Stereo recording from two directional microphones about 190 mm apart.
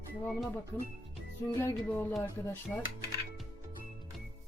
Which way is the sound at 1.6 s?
10° left (ahead or behind).